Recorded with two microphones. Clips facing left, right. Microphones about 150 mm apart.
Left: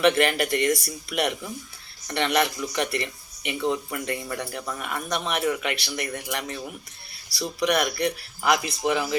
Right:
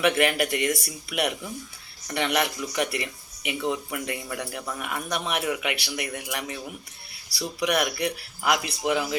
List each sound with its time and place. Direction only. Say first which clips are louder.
0.0 s speech: left 2 dB; 5° right (ahead or behind)